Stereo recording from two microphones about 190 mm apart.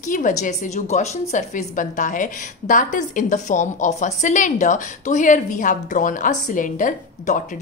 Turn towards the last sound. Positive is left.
turn(degrees=45)  # may be behind; listen again after turning